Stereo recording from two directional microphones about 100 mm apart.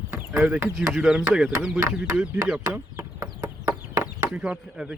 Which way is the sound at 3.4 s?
30° right (ahead or behind).